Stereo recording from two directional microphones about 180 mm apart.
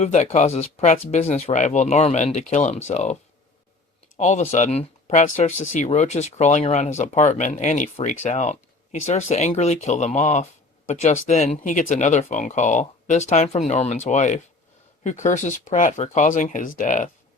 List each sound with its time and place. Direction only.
0.0 s speech: 40° left (ahead or behind)
4.2 s speech: 40° left (ahead or behind)